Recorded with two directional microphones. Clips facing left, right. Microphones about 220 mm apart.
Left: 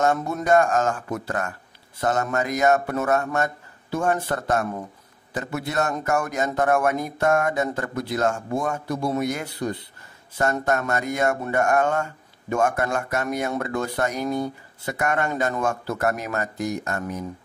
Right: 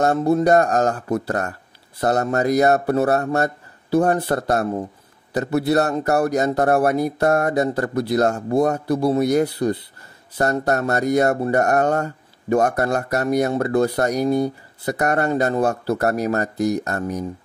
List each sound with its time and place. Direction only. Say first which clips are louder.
0.0 s speech: right 6 dB; 35° right (ahead or behind)